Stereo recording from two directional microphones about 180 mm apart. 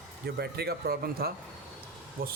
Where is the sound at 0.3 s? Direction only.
60° right (ahead or behind).